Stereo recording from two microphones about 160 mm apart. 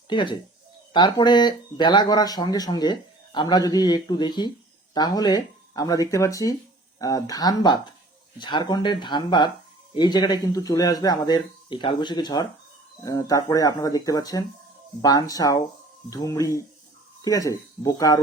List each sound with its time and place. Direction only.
0.1 s speech: 30° left (ahead or behind)